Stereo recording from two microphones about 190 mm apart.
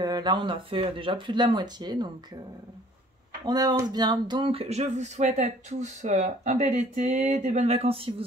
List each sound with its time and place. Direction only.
0.0 s speech: 20° right (ahead or behind)
3.4 s speech: 20° right (ahead or behind)